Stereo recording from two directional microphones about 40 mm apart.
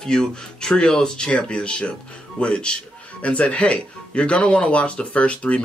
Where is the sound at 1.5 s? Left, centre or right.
Left.